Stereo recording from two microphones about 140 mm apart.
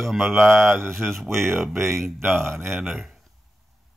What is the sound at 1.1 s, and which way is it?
Speech, centre (ahead or behind).